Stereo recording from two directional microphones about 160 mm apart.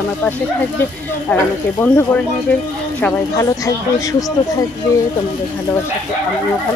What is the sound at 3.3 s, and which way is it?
Speech, 20° left (ahead or behind).